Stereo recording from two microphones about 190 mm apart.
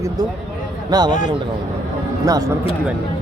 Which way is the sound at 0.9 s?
20° right (ahead or behind).